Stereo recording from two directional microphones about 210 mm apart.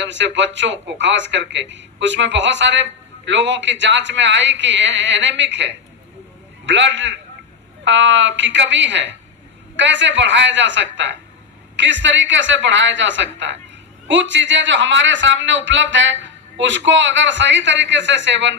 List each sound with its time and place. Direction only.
0.0 s speech: 60° right (ahead or behind)